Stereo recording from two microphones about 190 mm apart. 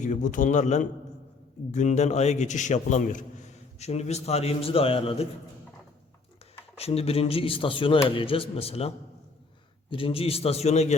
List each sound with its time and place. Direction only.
0.0 s a man's voice: 40° left (ahead or behind)
6.7 s speech: 30° left (ahead or behind)
9.9 s a man's voice: 30° left (ahead or behind)